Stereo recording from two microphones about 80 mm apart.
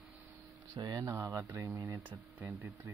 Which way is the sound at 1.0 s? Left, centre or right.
Right.